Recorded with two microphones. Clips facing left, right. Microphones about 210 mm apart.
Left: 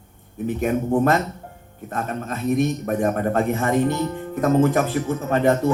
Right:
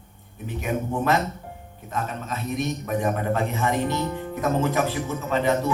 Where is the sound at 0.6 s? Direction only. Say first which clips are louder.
Left 6 dB; 50° left (ahead or behind).